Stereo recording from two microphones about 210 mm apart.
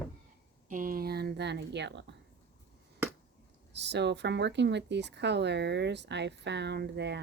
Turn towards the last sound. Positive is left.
turn(degrees=-55)  # may be behind; listen again after turning